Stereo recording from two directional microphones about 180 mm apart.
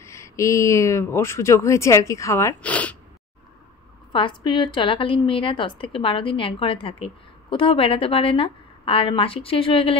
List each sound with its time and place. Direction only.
0.0 s speech: 15° left (ahead or behind)
4.1 s a woman's voice: 25° left (ahead or behind)